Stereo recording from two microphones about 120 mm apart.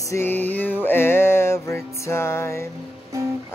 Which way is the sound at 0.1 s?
15° left (ahead or behind).